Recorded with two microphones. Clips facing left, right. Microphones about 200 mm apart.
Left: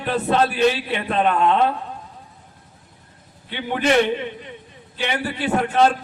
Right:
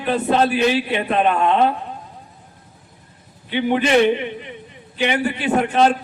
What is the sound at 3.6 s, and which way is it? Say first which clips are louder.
A man's voice: right 3 dB; 20° right (ahead or behind).